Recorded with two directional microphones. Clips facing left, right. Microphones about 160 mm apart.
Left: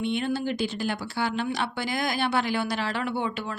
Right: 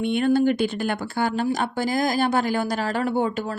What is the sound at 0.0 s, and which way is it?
Speech, 55° right (ahead or behind).